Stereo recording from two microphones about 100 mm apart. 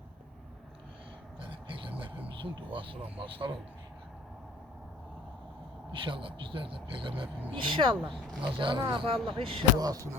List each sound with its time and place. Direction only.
1.4 s a sound: 60° right (ahead or behind)
2.7 s speech: 60° right (ahead or behind)
5.9 s speech: 60° right (ahead or behind)
9.7 s speech: 40° right (ahead or behind)